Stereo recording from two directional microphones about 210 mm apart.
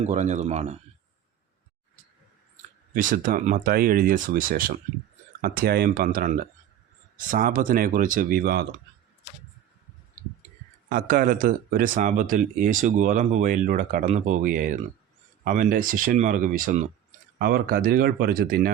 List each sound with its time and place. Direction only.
0.0 s speech: 35° right (ahead or behind)
2.6 s speech: 40° right (ahead or behind)
10.8 s speech: 40° right (ahead or behind)